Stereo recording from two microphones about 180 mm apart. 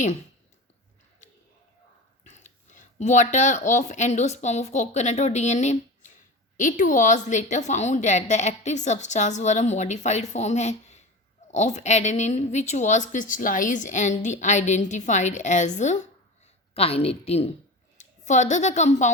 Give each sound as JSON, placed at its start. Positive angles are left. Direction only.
{"t": 2.2, "sound": "a woman's voice", "side_deg": 40}